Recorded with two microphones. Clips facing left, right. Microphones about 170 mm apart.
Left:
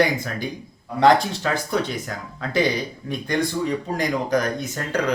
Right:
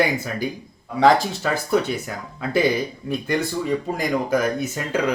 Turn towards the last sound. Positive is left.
turn(degrees=-5)  # may be behind; listen again after turning